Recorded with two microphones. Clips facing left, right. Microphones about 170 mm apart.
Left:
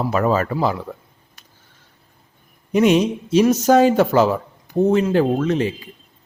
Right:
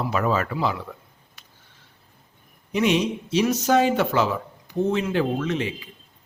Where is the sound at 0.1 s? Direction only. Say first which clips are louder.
Left 5 dB; 45° left (ahead or behind).